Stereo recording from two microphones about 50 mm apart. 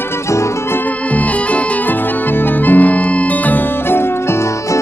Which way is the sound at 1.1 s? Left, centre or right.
Left.